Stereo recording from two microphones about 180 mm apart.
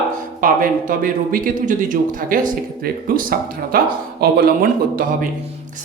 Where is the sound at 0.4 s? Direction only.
50° right (ahead or behind).